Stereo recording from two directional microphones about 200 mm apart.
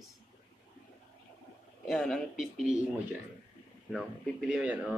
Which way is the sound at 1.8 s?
Centre (ahead or behind).